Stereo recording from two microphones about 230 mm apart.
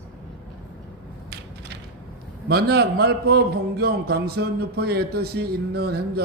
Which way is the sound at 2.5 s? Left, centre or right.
Right.